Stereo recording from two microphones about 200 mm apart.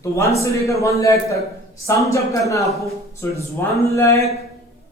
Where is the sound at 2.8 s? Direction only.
15° left (ahead or behind).